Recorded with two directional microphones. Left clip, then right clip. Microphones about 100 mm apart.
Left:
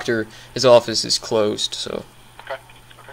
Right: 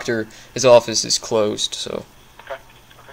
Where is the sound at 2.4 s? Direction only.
50° left (ahead or behind).